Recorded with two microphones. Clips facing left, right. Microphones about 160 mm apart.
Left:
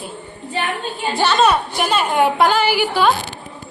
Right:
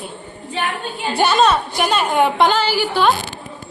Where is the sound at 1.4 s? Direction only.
5° left (ahead or behind).